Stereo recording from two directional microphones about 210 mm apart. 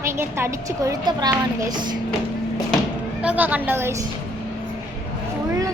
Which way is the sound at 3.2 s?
10° right (ahead or behind).